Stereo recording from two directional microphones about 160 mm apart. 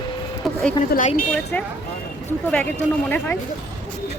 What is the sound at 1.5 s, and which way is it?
Speech, 10° left (ahead or behind).